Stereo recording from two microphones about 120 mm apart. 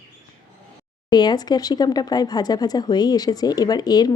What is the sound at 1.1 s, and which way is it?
Speech, 35° left (ahead or behind).